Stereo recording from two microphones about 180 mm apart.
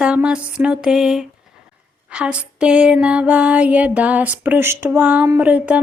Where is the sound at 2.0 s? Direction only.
5° right (ahead or behind).